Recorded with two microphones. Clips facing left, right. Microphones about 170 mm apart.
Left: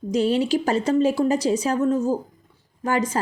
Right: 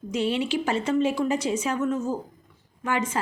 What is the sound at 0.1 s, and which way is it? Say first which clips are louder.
A woman's voice: left 5 dB; 40° left (ahead or behind).